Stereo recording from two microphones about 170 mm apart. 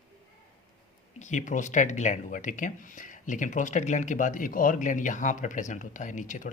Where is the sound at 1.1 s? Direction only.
45° left (ahead or behind).